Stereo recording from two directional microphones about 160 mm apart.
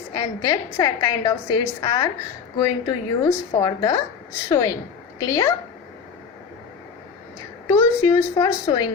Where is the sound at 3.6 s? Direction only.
25° left (ahead or behind).